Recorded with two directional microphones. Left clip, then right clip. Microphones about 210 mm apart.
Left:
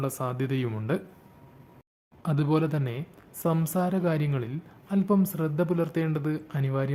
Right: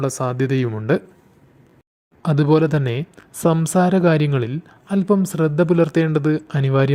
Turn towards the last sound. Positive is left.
turn(degrees=-35)  # may be behind; listen again after turning